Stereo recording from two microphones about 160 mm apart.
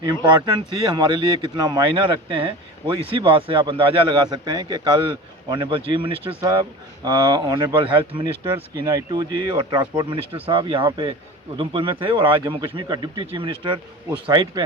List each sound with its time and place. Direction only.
0.1 s speech: 30° right (ahead or behind)